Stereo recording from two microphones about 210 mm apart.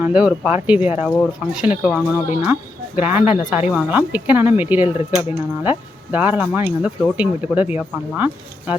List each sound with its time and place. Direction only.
0.0 s speech: 5° right (ahead or behind)
2.2 s speech: 30° left (ahead or behind)
2.5 s speech: 10° right (ahead or behind)